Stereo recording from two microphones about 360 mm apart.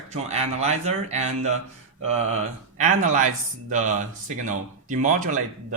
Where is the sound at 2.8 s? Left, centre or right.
Right.